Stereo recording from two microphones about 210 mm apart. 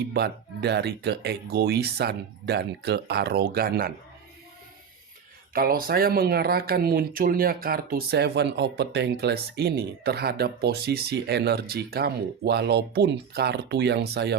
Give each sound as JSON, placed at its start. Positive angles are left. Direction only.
{"t": 0.1, "sound": "speech", "side_deg": -50}
{"t": 5.5, "sound": "speech", "side_deg": -45}